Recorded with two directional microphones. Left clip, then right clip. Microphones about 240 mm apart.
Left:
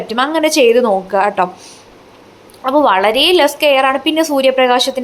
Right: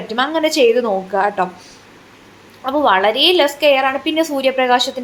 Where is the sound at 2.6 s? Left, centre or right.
Centre.